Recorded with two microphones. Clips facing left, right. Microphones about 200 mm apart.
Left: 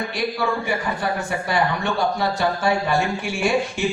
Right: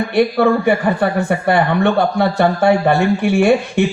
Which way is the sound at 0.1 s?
60° right (ahead or behind).